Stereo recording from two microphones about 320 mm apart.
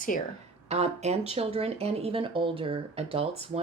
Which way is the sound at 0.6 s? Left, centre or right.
Centre.